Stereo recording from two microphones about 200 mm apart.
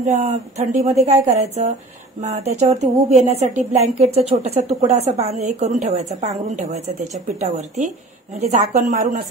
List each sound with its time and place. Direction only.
0.0 s speech: 35° right (ahead or behind)